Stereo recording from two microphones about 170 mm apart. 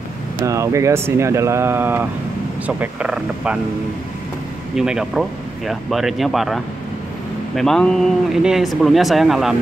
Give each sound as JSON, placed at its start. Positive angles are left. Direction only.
{"t": 0.4, "sound": "speech", "side_deg": -20}
{"t": 4.7, "sound": "speech", "side_deg": -5}